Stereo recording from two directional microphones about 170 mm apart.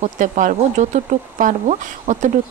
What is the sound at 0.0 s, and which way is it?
Speech, 50° right (ahead or behind).